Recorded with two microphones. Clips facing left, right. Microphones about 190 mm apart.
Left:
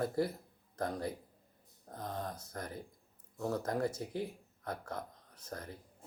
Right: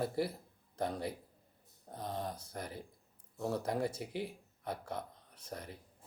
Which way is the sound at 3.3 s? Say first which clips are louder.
Even; 5° right (ahead or behind).